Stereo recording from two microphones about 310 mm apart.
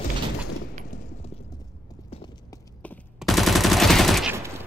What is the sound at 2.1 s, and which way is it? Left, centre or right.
Clip-clop, centre.